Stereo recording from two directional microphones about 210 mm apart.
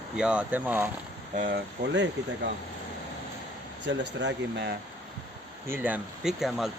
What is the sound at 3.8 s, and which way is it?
Speech, 55° right (ahead or behind).